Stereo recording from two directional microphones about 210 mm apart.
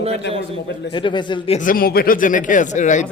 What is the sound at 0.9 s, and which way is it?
Speech, 20° left (ahead or behind).